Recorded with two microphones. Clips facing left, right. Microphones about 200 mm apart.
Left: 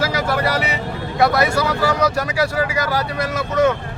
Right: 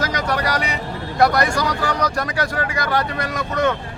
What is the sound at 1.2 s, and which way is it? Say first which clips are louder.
Speech: left 1 dB; 5° left (ahead or behind).